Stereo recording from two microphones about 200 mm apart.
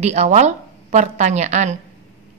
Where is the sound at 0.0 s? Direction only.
35° right (ahead or behind).